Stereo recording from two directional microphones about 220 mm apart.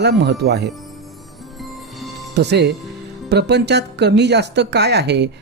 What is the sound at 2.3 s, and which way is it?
Speech, 50° right (ahead or behind).